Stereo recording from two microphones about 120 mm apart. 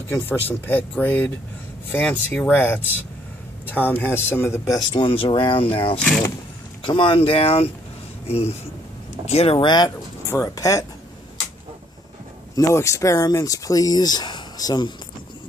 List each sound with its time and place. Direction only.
0.1 s speech: 15° left (ahead or behind)
4.9 s speech: 45° left (ahead or behind)
9.6 s speech: 35° left (ahead or behind)
10.2 s speech: 25° left (ahead or behind)
12.5 s speech: 25° left (ahead or behind)